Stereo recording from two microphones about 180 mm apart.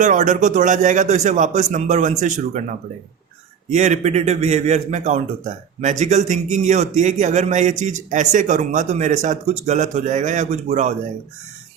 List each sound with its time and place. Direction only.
0.0 s speech: 45° right (ahead or behind)
3.7 s a man's voice: 40° right (ahead or behind)